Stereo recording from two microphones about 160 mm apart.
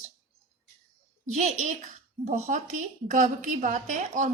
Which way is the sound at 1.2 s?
50° right (ahead or behind).